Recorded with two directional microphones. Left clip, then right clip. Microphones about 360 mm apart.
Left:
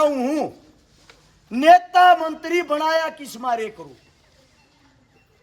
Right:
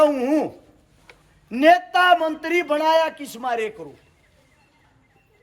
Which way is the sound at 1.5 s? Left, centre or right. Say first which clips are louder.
Left 2 dB; centre.